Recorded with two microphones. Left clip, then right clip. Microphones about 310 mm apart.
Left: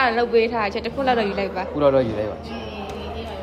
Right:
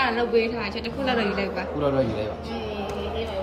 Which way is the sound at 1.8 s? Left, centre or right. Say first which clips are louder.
Left 7 dB; left.